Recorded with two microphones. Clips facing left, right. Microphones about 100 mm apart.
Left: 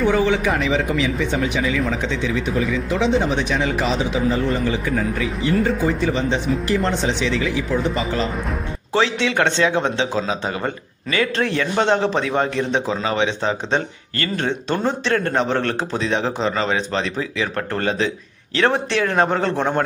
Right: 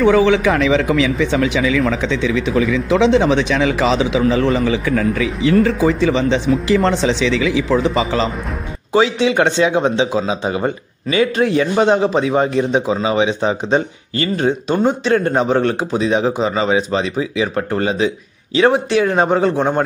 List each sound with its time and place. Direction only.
0.0 s speech: 90° right
8.9 s speech: 15° right (ahead or behind)